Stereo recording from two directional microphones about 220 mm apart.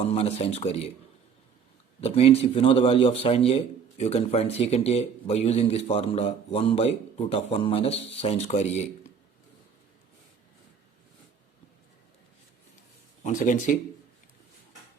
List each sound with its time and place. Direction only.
0.0 s a man's voice: 30° left (ahead or behind)
2.0 s a man's voice: 30° left (ahead or behind)
13.2 s speech: 35° left (ahead or behind)